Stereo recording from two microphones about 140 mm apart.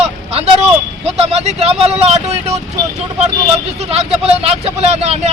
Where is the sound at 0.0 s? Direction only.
50° right (ahead or behind).